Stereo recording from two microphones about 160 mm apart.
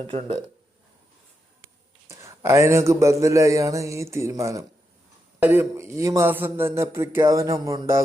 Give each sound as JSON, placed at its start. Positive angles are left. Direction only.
{"t": 0.0, "sound": "speech", "side_deg": -35}
{"t": 2.0, "sound": "speech", "side_deg": -20}